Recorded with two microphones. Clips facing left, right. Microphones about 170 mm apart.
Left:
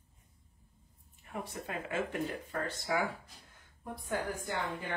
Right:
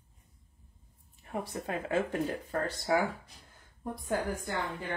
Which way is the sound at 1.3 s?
35° right (ahead or behind).